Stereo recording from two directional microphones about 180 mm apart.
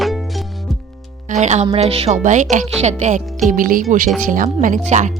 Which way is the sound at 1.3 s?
40° right (ahead or behind).